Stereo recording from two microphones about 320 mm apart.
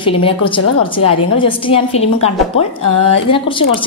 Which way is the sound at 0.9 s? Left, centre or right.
Left.